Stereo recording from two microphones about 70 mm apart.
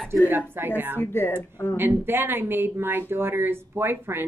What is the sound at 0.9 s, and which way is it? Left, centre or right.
Speech, left.